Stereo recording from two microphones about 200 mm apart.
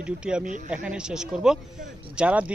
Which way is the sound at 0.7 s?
5° right (ahead or behind).